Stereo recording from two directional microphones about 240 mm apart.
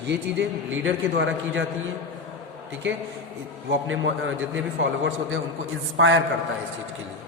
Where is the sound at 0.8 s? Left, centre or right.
Right.